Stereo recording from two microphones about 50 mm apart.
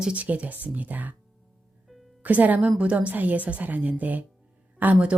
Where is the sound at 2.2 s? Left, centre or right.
Right.